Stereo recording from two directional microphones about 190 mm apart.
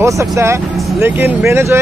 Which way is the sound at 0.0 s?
15° right (ahead or behind).